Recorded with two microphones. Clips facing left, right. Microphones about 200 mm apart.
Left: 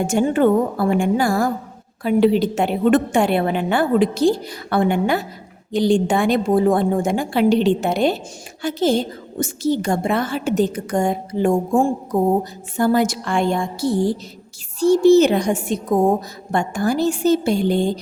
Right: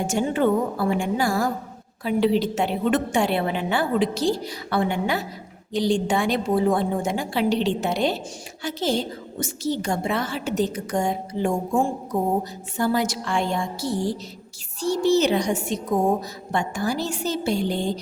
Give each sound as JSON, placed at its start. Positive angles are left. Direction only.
{"t": 0.1, "sound": "a woman's voice", "side_deg": 55}